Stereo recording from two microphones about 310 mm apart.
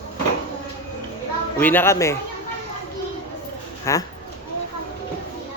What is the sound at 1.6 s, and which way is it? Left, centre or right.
Speech, centre.